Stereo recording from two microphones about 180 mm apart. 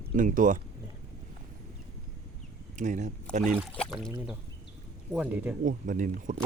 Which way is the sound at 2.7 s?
40° right (ahead or behind).